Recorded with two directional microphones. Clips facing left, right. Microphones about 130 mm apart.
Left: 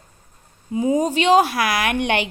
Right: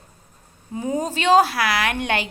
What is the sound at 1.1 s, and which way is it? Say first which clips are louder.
Speech: right 3 dB; 40° right (ahead or behind).